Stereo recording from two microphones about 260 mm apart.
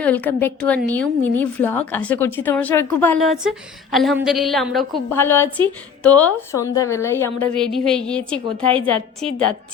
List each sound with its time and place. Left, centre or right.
0.0 s a woman's voice: centre
8.7 s a woman's voice: right